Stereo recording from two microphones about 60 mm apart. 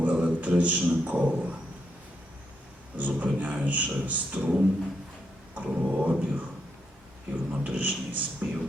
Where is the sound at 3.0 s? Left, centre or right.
Right.